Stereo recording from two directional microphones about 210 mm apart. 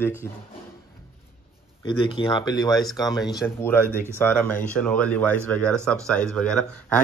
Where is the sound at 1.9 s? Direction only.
25° left (ahead or behind).